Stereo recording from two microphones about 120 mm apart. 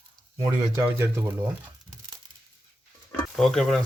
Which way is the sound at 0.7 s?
20° right (ahead or behind).